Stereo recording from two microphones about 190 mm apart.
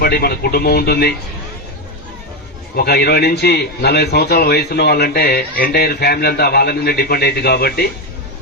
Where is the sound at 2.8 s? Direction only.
55° left (ahead or behind).